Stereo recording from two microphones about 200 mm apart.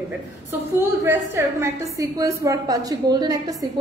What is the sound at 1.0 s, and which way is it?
A woman's voice, 10° right (ahead or behind).